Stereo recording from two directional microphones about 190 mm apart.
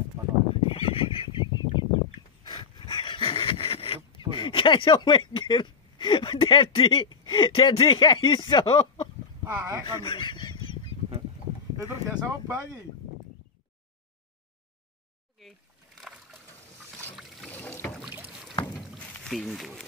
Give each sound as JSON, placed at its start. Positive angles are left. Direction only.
{"t": 0.2, "sound": "horse", "side_deg": -15}
{"t": 0.7, "sound": "fowl", "side_deg": 30}
{"t": 2.4, "sound": "dog", "side_deg": 25}
{"t": 4.3, "sound": "speech", "side_deg": 25}
{"t": 9.4, "sound": "speech", "side_deg": -10}
{"t": 10.0, "sound": "a sound", "side_deg": 25}
{"t": 12.1, "sound": "speech", "side_deg": -10}
{"t": 15.4, "sound": "a sound", "side_deg": 0}
{"t": 17.5, "sound": "rowboat", "side_deg": 10}
{"t": 18.0, "sound": "boat", "side_deg": -10}
{"t": 18.7, "sound": "a sound", "side_deg": 0}